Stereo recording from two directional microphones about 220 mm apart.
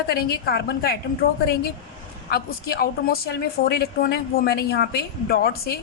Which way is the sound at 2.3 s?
45° left (ahead or behind).